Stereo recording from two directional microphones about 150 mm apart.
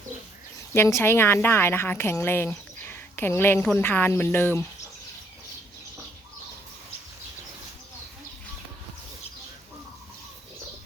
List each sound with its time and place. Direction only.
0.7 s a woman's voice: 15° left (ahead or behind)